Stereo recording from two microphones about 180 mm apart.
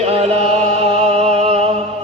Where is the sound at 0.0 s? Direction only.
35° right (ahead or behind).